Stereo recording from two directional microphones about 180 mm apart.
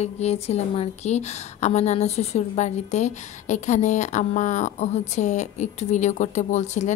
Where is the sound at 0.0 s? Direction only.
35° left (ahead or behind).